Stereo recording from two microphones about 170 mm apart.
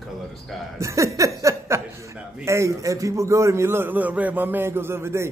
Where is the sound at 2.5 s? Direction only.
15° right (ahead or behind).